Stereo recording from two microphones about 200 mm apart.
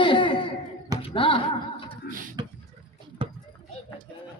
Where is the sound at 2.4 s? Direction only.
20° right (ahead or behind).